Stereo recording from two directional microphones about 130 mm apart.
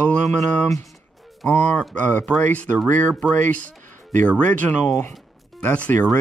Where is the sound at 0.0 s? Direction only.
10° left (ahead or behind).